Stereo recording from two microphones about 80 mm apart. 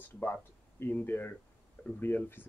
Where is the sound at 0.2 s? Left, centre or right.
Left.